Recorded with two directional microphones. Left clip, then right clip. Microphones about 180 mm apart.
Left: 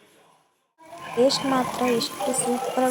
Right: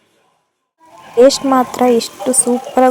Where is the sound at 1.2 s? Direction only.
45° right (ahead or behind).